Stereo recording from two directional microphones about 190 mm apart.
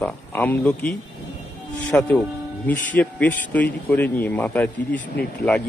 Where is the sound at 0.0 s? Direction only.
10° left (ahead or behind).